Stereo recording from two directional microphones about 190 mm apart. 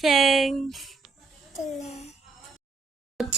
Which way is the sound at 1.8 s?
35° left (ahead or behind).